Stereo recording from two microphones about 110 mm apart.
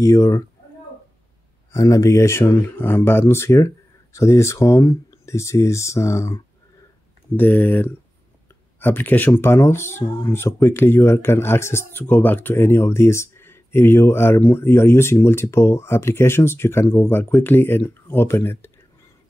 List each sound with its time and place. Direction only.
0.0 s speech: 30° left (ahead or behind)
1.7 s speech: 30° left (ahead or behind)